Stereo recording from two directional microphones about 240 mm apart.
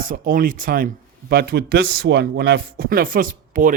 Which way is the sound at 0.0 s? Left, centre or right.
Right.